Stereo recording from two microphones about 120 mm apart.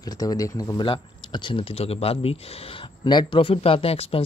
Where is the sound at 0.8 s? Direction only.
45° left (ahead or behind).